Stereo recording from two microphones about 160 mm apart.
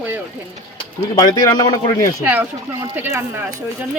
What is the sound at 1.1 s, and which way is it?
Speech, 25° left (ahead or behind).